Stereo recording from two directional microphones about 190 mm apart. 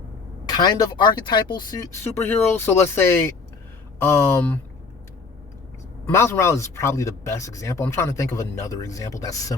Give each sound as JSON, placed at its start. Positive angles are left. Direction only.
{"t": 0.5, "sound": "speech", "side_deg": 20}
{"t": 6.1, "sound": "speech", "side_deg": 15}